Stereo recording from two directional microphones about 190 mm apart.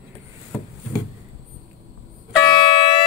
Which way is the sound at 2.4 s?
25° left (ahead or behind).